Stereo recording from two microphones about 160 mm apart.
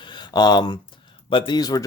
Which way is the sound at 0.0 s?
30° left (ahead or behind).